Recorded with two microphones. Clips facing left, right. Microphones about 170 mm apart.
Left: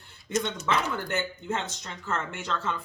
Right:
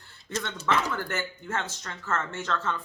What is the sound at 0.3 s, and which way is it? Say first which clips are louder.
Speech: left 1 dB; 15° left (ahead or behind).